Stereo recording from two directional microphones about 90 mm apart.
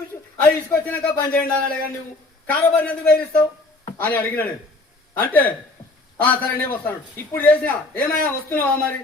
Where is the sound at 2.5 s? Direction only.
15° left (ahead or behind).